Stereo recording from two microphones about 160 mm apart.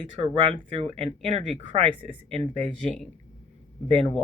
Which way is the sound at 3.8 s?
40° right (ahead or behind).